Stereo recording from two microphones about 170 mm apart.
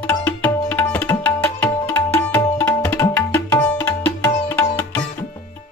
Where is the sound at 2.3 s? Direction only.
15° left (ahead or behind).